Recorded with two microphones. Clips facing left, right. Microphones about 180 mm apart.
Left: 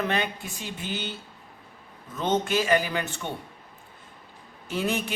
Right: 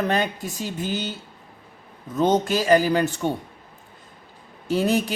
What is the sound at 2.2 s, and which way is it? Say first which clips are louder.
Speech: right 5 dB; 40° right (ahead or behind).